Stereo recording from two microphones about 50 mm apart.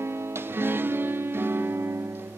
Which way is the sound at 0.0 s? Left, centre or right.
Right.